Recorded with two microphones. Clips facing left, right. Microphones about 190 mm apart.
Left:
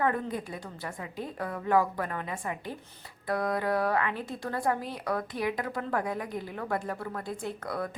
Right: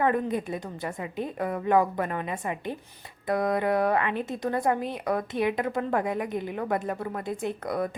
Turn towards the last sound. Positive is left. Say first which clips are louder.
# right 5 dB
turn(degrees=-20)  # may be behind; listen again after turning